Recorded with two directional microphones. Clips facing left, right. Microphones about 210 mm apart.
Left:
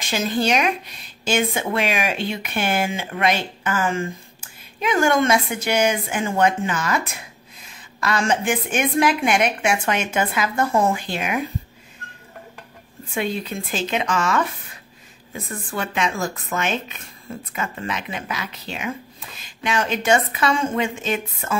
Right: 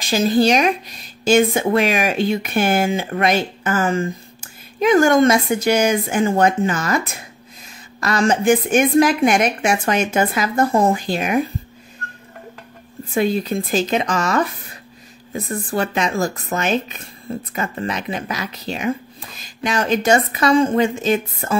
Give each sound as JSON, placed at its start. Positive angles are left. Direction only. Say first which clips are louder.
{"t": 0.0, "sound": "speech", "louder": "right 6 dB", "side_deg": -35}
{"t": 8.0, "sound": "speech", "louder": "right 4 dB", "side_deg": -40}
{"t": 13.1, "sound": "speech", "louder": "right 7 dB", "side_deg": -40}